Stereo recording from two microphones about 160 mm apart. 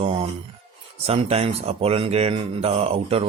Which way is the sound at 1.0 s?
40° right (ahead or behind).